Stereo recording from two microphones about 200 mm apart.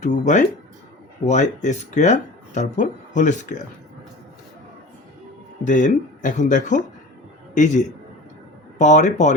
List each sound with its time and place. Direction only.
0.0 s speech: 35° left (ahead or behind)
5.6 s speech: 40° left (ahead or behind)